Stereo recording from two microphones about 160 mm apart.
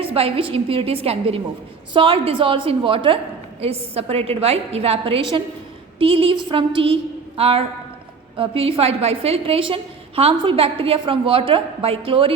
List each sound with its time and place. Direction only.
0.0 s a woman's voice: 35° right (ahead or behind)